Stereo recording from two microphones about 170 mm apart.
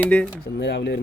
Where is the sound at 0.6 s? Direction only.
90° left.